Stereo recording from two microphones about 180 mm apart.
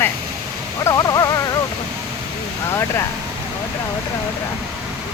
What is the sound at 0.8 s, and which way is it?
Dog, 20° left (ahead or behind).